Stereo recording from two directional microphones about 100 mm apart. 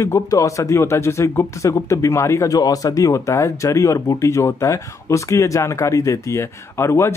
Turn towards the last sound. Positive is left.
turn(degrees=25)  # may be behind; listen again after turning